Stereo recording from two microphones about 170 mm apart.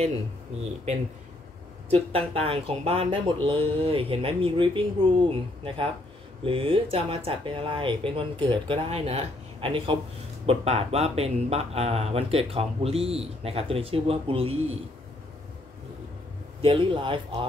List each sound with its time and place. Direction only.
1.9 s speech: 35° right (ahead or behind)
16.6 s speech: 30° right (ahead or behind)